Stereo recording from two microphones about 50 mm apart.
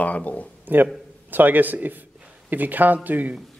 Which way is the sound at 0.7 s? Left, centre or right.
Right.